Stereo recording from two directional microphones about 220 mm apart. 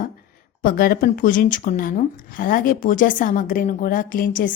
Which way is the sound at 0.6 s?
40° left (ahead or behind).